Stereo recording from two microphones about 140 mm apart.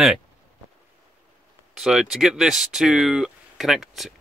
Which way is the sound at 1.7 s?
5° right (ahead or behind).